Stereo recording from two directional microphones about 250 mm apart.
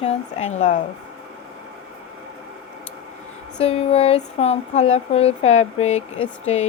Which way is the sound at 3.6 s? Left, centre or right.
Left.